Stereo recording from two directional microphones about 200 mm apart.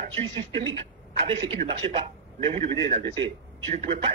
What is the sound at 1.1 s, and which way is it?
A man's voice, 25° right (ahead or behind).